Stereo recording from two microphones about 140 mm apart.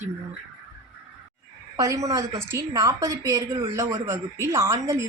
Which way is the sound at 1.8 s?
25° right (ahead or behind).